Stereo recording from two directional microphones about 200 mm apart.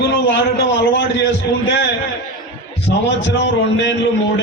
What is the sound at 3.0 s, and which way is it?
Speech, 60° left (ahead or behind).